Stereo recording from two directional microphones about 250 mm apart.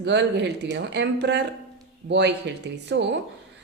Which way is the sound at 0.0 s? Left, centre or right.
Right.